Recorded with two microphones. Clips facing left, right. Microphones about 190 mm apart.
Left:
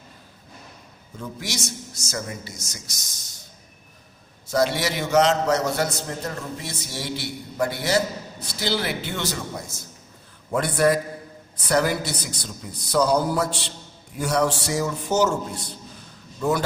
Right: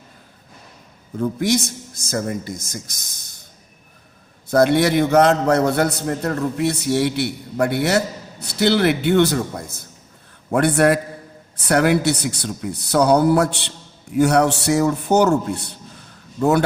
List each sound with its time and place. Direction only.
1.2 s a man's voice: 55° right (ahead or behind)
4.5 s a man's voice: 55° right (ahead or behind)